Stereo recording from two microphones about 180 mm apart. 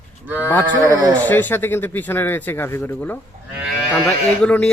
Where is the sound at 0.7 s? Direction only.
20° right (ahead or behind).